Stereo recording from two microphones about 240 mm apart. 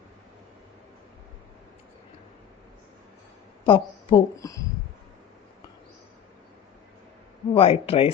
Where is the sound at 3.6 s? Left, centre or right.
Left.